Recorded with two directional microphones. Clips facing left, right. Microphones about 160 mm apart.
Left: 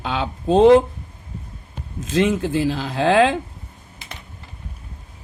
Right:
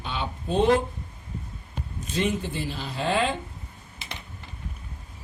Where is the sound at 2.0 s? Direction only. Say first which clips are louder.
Left 8 dB; 90° left.